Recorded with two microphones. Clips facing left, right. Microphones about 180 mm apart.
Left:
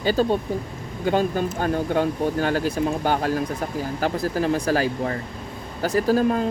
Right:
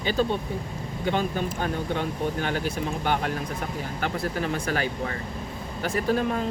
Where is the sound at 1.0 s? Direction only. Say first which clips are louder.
Left 5 dB; 45° left (ahead or behind).